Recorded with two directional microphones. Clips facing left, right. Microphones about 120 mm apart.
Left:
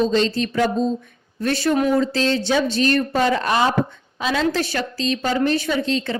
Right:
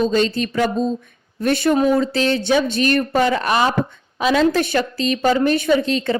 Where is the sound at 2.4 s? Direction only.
55° right (ahead or behind).